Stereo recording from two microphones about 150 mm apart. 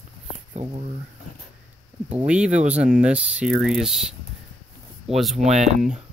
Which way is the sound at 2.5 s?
50° right (ahead or behind).